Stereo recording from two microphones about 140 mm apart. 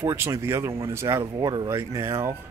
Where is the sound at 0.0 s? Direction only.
20° right (ahead or behind).